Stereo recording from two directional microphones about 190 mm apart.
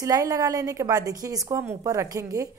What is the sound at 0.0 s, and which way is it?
A woman's voice, 15° right (ahead or behind).